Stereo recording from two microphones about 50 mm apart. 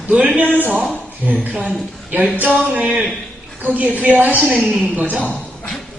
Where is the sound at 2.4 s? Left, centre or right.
Right.